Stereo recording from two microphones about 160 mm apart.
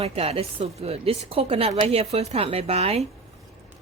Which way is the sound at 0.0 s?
40° right (ahead or behind).